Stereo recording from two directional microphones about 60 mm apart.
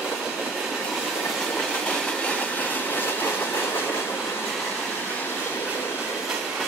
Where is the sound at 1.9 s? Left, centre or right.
Centre; by 3.8 s left.